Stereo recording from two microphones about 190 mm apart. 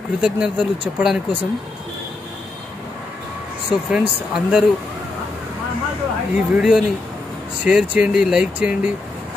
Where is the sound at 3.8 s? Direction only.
5° right (ahead or behind).